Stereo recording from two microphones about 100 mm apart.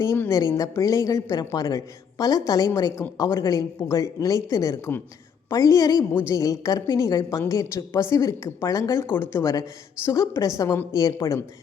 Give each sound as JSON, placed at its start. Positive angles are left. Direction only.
{"t": 0.0, "sound": "a woman's voice", "side_deg": 30}